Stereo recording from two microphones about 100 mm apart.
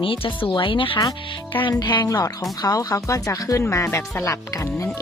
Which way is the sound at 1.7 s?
45° left (ahead or behind).